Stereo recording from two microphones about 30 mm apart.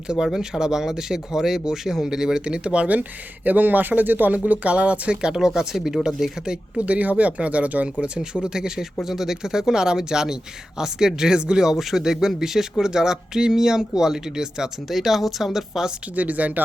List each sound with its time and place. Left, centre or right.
0.3 s speech: centre
2.4 s speech: right
2.8 s speech: right
4.7 s speech: right
5.3 s speech: centre
6.4 s speech: right
6.8 s speech: right
8.0 s speech: right
11.8 s speech: centre
14.8 s speech: centre
16.1 s speech: right